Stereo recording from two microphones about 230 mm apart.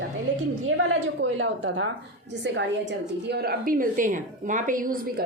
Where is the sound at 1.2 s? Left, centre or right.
Right.